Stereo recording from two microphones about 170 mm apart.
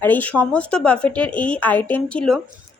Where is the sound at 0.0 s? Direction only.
10° left (ahead or behind).